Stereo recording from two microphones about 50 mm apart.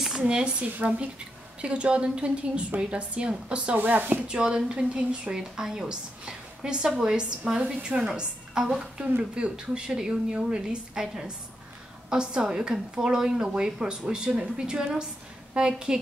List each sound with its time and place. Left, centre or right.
0.2 s a woman's voice: right
4.3 s a woman's voice: centre